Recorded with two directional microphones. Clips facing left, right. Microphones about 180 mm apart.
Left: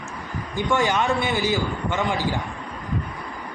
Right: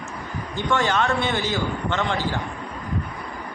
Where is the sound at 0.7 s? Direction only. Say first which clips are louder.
Even; 15° left (ahead or behind).